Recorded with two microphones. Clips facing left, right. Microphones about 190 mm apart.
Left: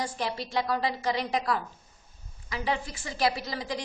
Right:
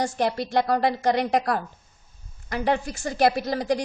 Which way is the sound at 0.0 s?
55° right (ahead or behind).